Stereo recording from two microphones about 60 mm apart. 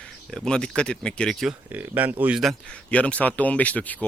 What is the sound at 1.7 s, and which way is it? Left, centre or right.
Speech, right.